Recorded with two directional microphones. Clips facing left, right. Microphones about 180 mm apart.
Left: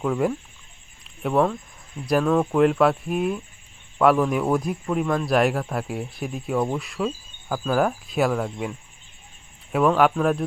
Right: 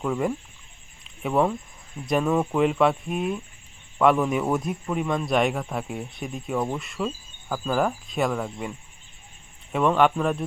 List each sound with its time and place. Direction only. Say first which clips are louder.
0.0 s a man's voice: left 2 dB; centre (ahead or behind)
9.7 s a man's voice: left 2 dB; 5° left (ahead or behind)